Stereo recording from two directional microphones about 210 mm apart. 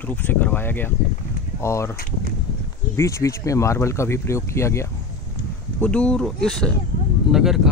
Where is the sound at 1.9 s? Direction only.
45° left (ahead or behind).